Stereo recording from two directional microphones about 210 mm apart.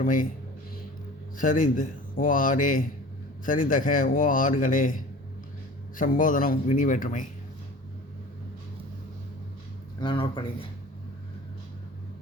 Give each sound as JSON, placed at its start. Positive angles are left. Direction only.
{"t": 0.0, "sound": "speech", "side_deg": 40}
{"t": 1.4, "sound": "speech", "side_deg": 40}
{"t": 10.0, "sound": "speech", "side_deg": 25}